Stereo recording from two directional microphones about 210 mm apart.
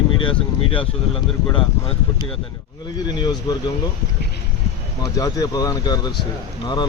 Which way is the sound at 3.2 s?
20° left (ahead or behind).